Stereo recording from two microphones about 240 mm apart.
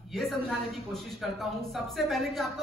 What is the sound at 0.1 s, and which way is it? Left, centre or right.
A man's voice, centre.